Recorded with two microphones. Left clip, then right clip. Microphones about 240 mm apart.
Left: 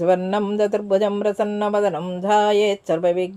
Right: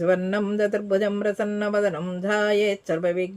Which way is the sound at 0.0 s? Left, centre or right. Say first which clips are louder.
Left 4 dB; centre.